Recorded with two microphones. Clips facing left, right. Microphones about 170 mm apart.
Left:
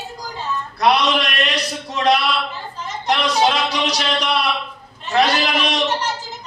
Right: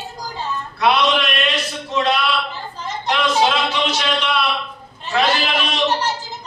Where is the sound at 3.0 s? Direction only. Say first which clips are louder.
Even; 40° left (ahead or behind).